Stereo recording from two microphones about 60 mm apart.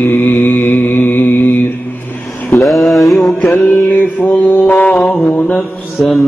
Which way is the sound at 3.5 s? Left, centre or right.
Left.